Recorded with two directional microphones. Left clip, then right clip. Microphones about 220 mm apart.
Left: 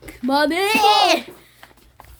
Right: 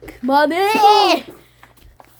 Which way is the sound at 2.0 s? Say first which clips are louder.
Even; 50° left (ahead or behind).